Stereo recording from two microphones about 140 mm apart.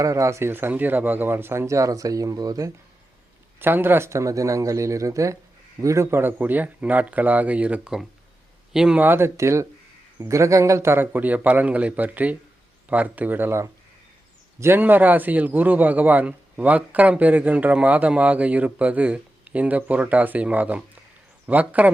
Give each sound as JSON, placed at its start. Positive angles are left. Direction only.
{"t": 0.0, "sound": "speech", "side_deg": -20}
{"t": 3.6, "sound": "a man's voice", "side_deg": -15}